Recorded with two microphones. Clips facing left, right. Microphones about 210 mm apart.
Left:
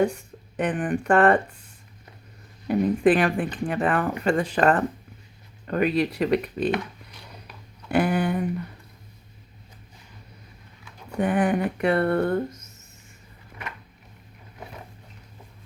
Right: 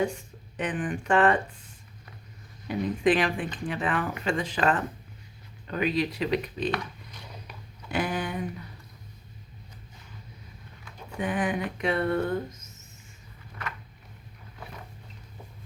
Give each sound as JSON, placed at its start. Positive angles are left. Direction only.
{"t": 0.5, "sound": "speech", "side_deg": 55}
{"t": 2.6, "sound": "speech", "side_deg": 55}
{"t": 7.9, "sound": "speech", "side_deg": 55}
{"t": 11.2, "sound": "speech", "side_deg": 55}